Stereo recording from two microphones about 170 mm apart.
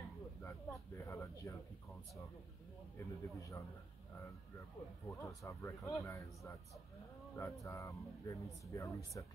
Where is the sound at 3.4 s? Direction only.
20° left (ahead or behind).